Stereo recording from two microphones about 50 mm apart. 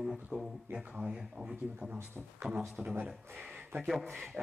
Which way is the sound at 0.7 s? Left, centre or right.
Centre.